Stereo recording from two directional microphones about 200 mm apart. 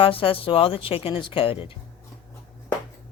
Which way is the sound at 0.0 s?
25° left (ahead or behind).